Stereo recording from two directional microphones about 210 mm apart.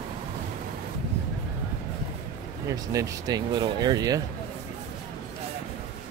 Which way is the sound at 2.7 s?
15° right (ahead or behind).